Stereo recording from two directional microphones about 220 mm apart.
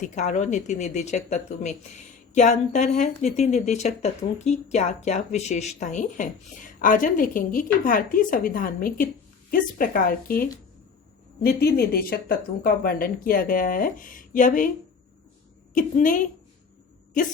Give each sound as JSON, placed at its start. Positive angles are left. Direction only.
{"t": 0.0, "sound": "speech", "side_deg": 30}
{"t": 15.7, "sound": "speech", "side_deg": 35}